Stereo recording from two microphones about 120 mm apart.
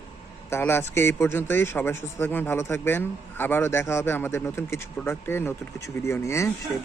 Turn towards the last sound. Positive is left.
turn(degrees=25)  # may be behind; listen again after turning